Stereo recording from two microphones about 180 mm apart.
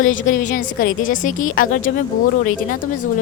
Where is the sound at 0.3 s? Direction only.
45° left (ahead or behind).